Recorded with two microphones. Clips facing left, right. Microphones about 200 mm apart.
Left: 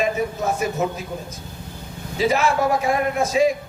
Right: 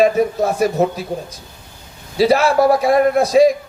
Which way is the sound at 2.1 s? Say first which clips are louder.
Right 6 dB; 35° right (ahead or behind).